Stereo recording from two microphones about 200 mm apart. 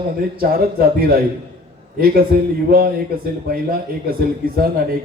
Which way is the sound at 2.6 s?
45° right (ahead or behind).